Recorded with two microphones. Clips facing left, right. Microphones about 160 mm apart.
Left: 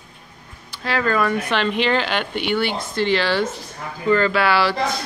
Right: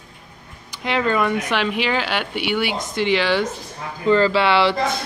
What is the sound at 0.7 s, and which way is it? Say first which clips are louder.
Speech: right 1 dB; 20° right (ahead or behind).